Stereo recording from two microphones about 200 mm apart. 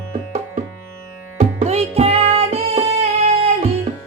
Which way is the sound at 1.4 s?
30° right (ahead or behind).